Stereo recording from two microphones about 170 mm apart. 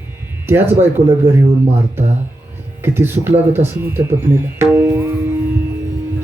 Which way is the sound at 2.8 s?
15° right (ahead or behind).